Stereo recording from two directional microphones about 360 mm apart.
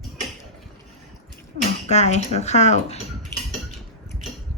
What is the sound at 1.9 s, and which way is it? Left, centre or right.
Speech, centre.